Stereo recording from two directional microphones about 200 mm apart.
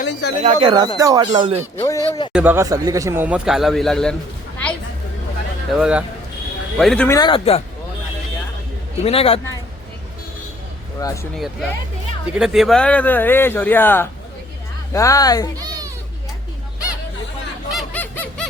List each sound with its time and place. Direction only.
0.1 s a sound: 60° left (ahead or behind)
0.4 s speech: 25° right (ahead or behind)
1.8 s speech: 15° left (ahead or behind)
2.3 s a man's voice: 10° right (ahead or behind)
5.8 s speech: 5° right (ahead or behind)
7.2 s speech: 25° left (ahead or behind)
9.0 s speech: 30° left (ahead or behind)
11.0 s speech: 15° left (ahead or behind)
11.3 s speech: centre (ahead or behind); by 15.4 s 20° left (ahead or behind)
15.6 s children playing: 20° right (ahead or behind)
17.7 s honk: 5° left (ahead or behind)